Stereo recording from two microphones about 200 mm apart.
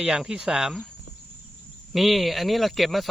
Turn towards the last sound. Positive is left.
turn(degrees=0)  # may be behind; listen again after turning